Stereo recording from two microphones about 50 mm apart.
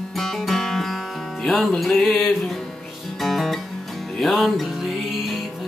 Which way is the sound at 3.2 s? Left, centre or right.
Centre.